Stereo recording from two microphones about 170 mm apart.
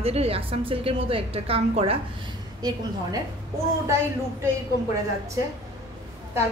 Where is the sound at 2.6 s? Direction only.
25° right (ahead or behind).